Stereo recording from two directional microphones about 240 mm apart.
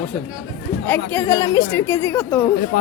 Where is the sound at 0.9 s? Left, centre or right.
Centre.